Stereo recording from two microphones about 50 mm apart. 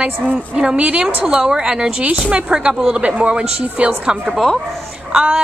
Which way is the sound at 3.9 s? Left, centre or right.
Centre.